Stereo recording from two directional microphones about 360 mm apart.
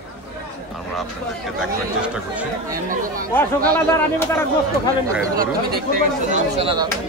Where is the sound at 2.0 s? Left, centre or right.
Centre.